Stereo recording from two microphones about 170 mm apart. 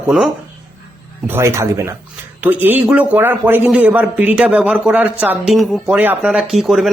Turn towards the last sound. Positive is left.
turn(degrees=0)  # may be behind; listen again after turning